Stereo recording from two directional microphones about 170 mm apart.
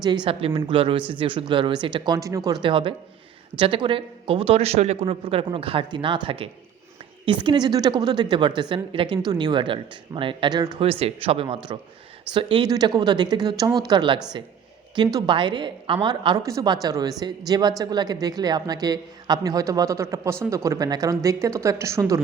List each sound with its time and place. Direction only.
0.0 s a man's voice: 25° right (ahead or behind)